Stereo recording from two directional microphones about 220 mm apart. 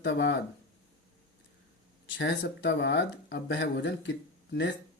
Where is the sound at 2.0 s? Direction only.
55° left (ahead or behind).